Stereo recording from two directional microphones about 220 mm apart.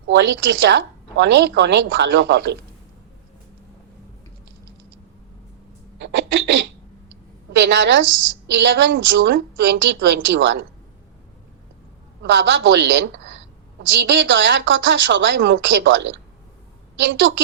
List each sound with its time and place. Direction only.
0.1 s a woman's voice: 50° right (ahead or behind)
6.0 s a sound: 50° right (ahead or behind)
7.5 s a woman's voice: 50° right (ahead or behind)
12.2 s a woman's voice: 55° right (ahead or behind)